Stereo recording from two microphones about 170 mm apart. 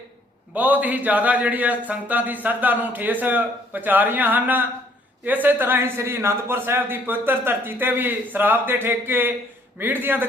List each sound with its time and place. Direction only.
0.5 s a man's voice: 10° right (ahead or behind)